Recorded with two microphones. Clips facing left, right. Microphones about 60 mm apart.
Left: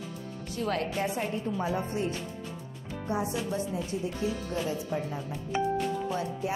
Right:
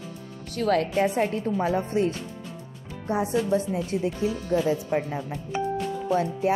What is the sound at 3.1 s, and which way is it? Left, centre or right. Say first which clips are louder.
Speech: right 7 dB; right.